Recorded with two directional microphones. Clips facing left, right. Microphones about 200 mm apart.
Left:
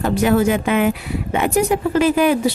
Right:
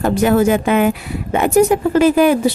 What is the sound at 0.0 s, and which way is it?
Speech, 45° right (ahead or behind).